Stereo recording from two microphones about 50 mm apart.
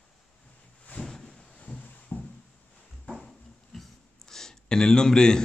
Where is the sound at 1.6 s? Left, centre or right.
Left.